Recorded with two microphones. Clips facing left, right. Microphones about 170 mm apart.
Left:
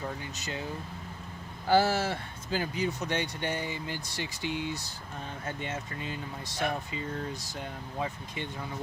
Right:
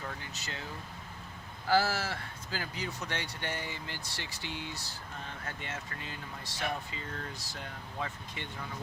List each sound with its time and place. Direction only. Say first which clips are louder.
0.3 s speech: left 6 dB; 20° left (ahead or behind)
1.6 s speech: left 4 dB; 25° left (ahead or behind)